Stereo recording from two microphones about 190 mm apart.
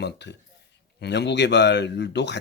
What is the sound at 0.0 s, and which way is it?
Speech, 65° left (ahead or behind).